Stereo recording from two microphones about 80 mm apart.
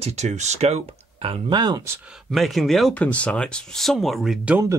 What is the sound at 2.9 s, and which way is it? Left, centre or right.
Speech, centre.